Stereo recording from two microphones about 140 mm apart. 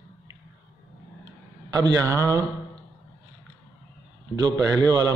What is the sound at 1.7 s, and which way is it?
Speech, 25° right (ahead or behind).